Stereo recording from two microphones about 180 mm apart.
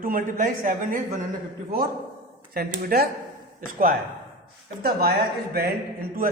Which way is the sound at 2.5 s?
55° right (ahead or behind).